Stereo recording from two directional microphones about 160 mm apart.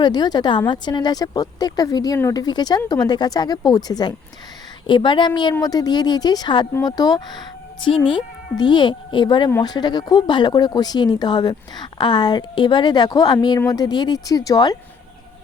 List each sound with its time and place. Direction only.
0.0 s speech: 25° left (ahead or behind)